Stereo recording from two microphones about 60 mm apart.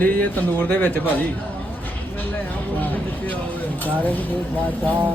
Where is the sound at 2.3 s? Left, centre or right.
Left.